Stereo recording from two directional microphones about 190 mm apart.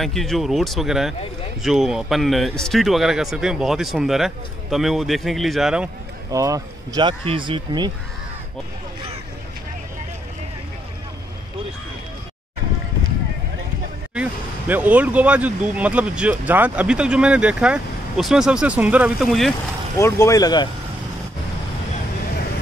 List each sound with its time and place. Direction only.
0.0 s speech: centre (ahead or behind)
6.3 s speech: 15° right (ahead or behind)
14.1 s speech: 10° right (ahead or behind)
20.0 s speech: 15° left (ahead or behind)